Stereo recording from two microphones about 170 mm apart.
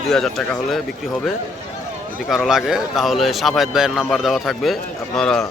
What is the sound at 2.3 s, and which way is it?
Speech, 5° right (ahead or behind).